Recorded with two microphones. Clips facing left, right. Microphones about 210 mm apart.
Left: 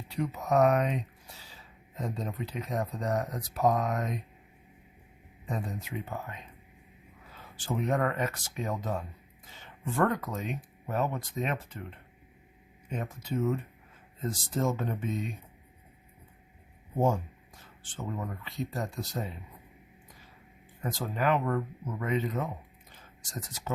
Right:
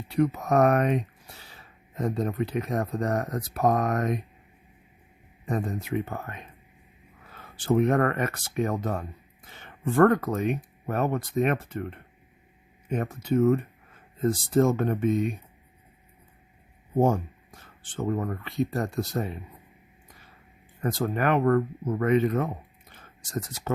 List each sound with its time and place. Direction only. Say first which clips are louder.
0.1 s speech: right 5 dB; 60° right (ahead or behind)
5.5 s speech: right 7 dB; 60° right (ahead or behind)
17.0 s speech: right 5 dB; 60° right (ahead or behind)
20.8 s speech: right 4 dB; 60° right (ahead or behind)
22.9 s a sound: right 9 dB; 60° right (ahead or behind)